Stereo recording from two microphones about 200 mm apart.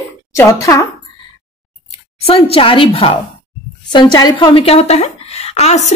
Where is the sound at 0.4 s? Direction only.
15° left (ahead or behind).